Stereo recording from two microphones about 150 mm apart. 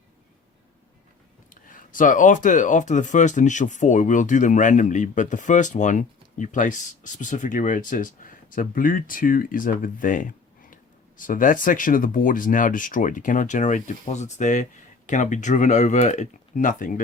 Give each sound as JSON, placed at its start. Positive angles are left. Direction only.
{"t": 1.6, "sound": "speech", "side_deg": 60}